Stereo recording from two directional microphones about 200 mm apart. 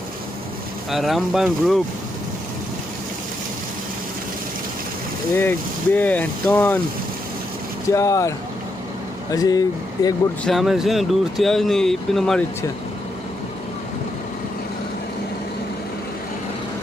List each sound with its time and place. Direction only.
0.9 s speech: centre (ahead or behind)
5.3 s speech: 10° left (ahead or behind)
7.9 s speech: 15° left (ahead or behind)
9.3 s speech: 20° left (ahead or behind)
10.4 s speech: centre (ahead or behind)